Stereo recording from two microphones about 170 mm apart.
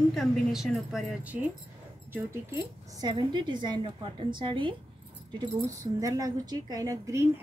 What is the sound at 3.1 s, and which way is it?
A woman's voice, 25° right (ahead or behind).